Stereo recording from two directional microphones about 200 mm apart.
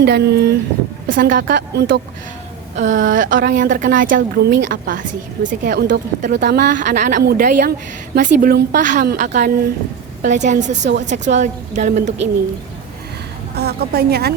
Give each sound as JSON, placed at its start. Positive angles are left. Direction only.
{"t": 0.0, "sound": "a woman's voice", "side_deg": -55}
{"t": 2.7, "sound": "a woman's voice", "side_deg": -40}
{"t": 4.1, "sound": "a woman's voice", "side_deg": -65}
{"t": 4.7, "sound": "a woman's voice", "side_deg": -40}
{"t": 6.3, "sound": "a woman's voice", "side_deg": -55}
{"t": 6.7, "sound": "a woman's voice", "side_deg": -40}
{"t": 8.8, "sound": "speech", "side_deg": -40}
{"t": 10.6, "sound": "a woman's voice", "side_deg": -60}
{"t": 11.0, "sound": "speech", "side_deg": -35}
{"t": 13.6, "sound": "a woman's voice", "side_deg": -50}